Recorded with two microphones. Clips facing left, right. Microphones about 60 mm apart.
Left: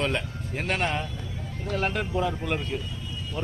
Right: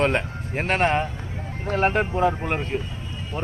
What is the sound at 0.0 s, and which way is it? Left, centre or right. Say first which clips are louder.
A man's voice: right 6 dB; right.